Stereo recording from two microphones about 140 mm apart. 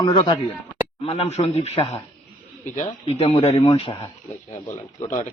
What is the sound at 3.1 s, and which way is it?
Speech, 50° left (ahead or behind).